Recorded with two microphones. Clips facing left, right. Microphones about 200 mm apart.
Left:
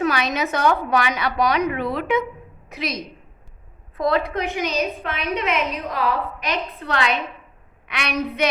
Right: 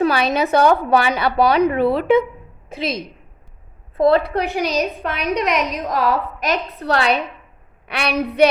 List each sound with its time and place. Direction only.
0.0 s a woman's voice: 30° right (ahead or behind)